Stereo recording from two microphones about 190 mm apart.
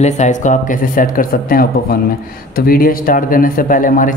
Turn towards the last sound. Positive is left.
turn(degrees=45)  # may be behind; listen again after turning